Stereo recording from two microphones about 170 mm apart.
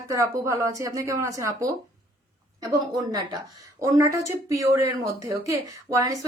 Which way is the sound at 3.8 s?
20° right (ahead or behind).